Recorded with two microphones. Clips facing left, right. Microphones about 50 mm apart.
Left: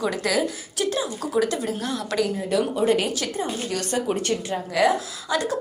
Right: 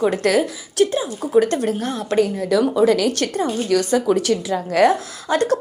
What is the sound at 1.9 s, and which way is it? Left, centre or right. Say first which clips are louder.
Speech: right 5 dB; right.